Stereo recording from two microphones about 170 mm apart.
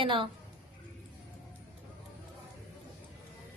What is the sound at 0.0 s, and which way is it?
Speech, 30° right (ahead or behind).